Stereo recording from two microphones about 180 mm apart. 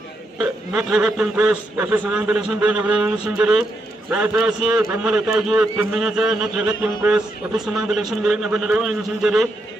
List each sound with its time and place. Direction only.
0.3 s a man's voice: 5° right (ahead or behind)